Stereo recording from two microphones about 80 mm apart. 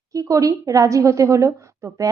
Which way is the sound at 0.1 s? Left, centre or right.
Right.